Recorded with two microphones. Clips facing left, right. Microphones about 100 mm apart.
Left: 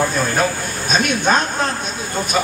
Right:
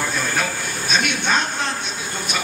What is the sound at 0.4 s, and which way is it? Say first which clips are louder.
A man's voice: left 5 dB; 40° left (ahead or behind).